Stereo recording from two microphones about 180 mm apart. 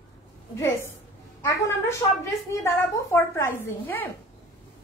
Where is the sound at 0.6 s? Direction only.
15° left (ahead or behind).